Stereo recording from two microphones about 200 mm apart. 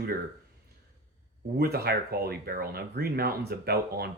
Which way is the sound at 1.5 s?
50° right (ahead or behind).